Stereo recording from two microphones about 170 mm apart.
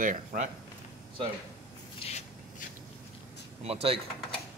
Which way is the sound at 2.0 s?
40° left (ahead or behind).